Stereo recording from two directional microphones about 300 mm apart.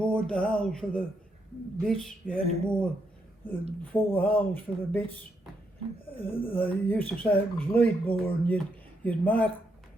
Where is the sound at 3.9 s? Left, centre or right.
Centre.